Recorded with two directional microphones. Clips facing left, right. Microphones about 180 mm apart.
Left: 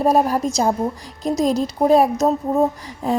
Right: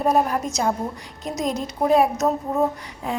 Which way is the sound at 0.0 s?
35° left (ahead or behind).